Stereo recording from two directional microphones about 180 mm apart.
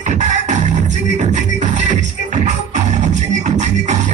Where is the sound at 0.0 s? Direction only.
40° right (ahead or behind).